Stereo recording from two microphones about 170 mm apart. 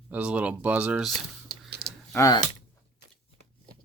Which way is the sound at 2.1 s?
20° left (ahead or behind).